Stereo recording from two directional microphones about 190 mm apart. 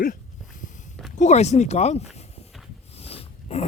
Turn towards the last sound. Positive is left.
turn(degrees=30)  # may be behind; listen again after turning